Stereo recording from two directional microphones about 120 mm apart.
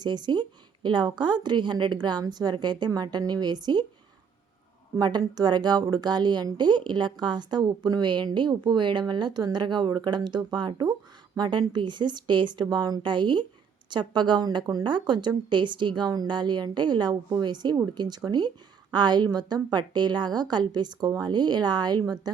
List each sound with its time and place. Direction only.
0.0 s a woman's voice: 35° right (ahead or behind)
4.9 s a woman's voice: 35° right (ahead or behind)